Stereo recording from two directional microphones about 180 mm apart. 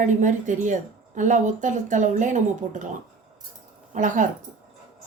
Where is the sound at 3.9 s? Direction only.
45° right (ahead or behind).